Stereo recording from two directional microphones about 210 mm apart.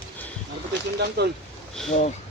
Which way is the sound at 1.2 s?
50° right (ahead or behind).